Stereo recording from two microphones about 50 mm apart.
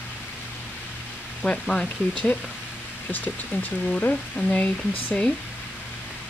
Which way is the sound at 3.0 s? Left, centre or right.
Left.